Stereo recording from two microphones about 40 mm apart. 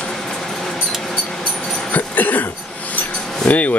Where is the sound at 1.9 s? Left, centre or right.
Left.